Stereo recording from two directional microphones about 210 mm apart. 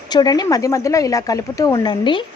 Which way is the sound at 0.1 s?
20° left (ahead or behind).